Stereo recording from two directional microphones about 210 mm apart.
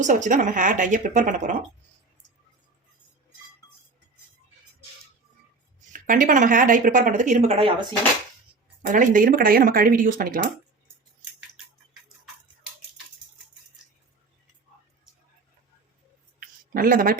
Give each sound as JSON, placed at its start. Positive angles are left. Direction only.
{"t": 0.0, "sound": "speech", "side_deg": -35}
{"t": 5.9, "sound": "speech", "side_deg": -40}
{"t": 8.9, "sound": "speech", "side_deg": -40}
{"t": 16.4, "sound": "a sound", "side_deg": -45}